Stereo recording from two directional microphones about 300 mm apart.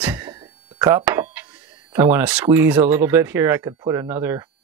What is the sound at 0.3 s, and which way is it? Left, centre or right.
Speech, centre.